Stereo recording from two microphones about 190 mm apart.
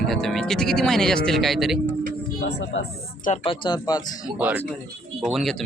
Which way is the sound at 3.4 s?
25° left (ahead or behind).